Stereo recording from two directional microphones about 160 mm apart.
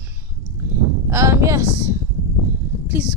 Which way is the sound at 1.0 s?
20° right (ahead or behind).